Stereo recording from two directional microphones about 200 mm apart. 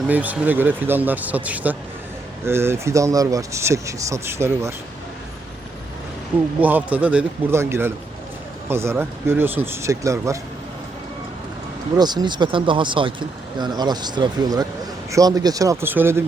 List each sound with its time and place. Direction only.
0.1 s speech: 10° right (ahead or behind)
6.6 s speech: 10° right (ahead or behind)
11.9 s speech: 20° right (ahead or behind)